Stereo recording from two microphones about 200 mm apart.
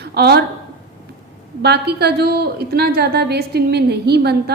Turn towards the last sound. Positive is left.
turn(degrees=-55)  # may be behind; listen again after turning